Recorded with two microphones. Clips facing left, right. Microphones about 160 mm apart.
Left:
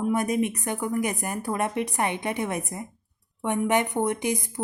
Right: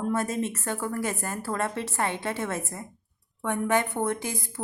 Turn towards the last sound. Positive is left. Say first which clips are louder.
# left 4 dB
turn(degrees=20)  # may be behind; listen again after turning